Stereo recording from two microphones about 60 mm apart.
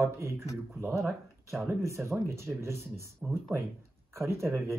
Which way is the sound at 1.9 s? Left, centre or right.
Right.